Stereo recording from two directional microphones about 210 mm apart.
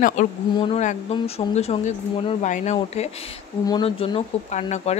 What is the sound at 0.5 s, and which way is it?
Speech, 25° left (ahead or behind).